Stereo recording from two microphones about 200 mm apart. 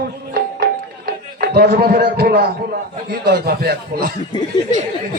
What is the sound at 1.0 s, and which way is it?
A man's voice, 50° right (ahead or behind).